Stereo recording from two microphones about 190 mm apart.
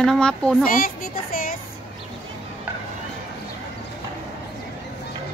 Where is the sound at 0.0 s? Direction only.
5° left (ahead or behind).